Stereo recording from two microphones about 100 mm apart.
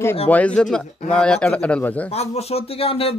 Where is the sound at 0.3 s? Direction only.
10° left (ahead or behind).